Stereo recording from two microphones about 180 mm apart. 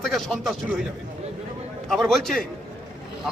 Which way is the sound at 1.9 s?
Centre (ahead or behind).